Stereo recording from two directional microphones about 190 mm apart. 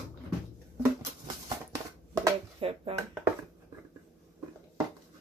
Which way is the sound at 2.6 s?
30° right (ahead or behind).